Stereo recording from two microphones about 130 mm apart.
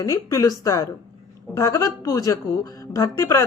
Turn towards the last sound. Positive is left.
turn(degrees=20)  # may be behind; listen again after turning